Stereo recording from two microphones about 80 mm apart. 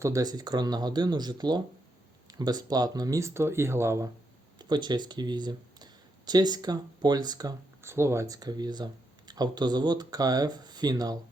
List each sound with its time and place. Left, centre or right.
0.0 s speech: right
4.5 s speech: right
7.8 s speech: right
8.3 s speech: right